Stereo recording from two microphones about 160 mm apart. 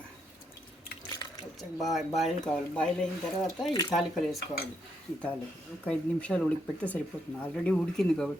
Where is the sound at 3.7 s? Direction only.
30° left (ahead or behind).